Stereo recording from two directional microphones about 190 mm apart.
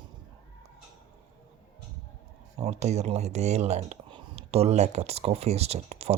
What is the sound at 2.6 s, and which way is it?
Speech, 35° right (ahead or behind).